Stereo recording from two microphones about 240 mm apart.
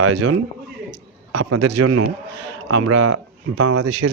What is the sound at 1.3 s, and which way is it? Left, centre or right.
A man's voice, right.